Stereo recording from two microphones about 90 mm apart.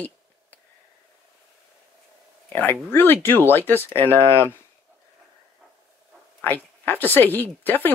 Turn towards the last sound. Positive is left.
turn(degrees=20)  # may be behind; listen again after turning